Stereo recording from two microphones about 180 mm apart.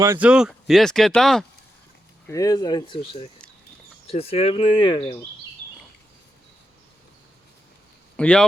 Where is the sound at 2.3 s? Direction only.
20° left (ahead or behind).